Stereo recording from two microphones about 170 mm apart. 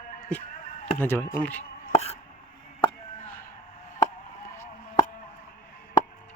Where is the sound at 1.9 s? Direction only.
40° left (ahead or behind).